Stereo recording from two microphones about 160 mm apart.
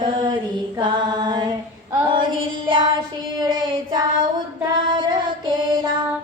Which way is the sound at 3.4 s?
25° right (ahead or behind).